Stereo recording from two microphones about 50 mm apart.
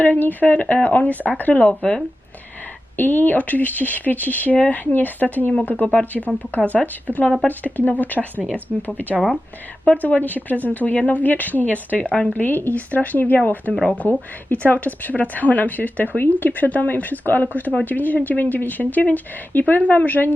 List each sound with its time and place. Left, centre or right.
0.0 s speech: left
2.9 s speech: left
8.7 s speech: centre
10.0 s speech: left
12.3 s speech: left